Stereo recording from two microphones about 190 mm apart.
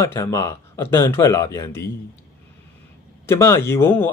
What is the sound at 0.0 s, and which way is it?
Speech, 15° left (ahead or behind).